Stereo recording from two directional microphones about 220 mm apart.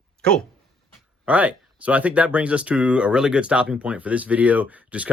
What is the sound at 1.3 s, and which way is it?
Speech, 5° right (ahead or behind).